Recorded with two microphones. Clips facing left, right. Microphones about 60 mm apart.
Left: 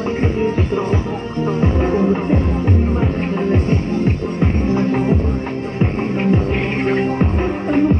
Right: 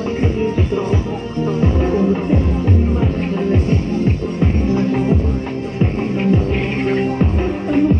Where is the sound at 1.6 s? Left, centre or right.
Left.